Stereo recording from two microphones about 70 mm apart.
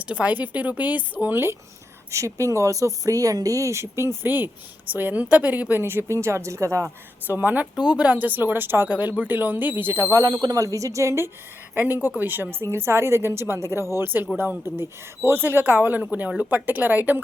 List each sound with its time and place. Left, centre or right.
0.0 s speech: centre
2.0 s speech: right
5.8 s speech: right
6.8 s speech: right
8.9 s speech: right
10.2 s speech: right
10.6 s speech: right
11.7 s speech: right